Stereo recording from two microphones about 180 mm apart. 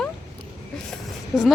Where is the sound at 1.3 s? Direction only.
5° left (ahead or behind).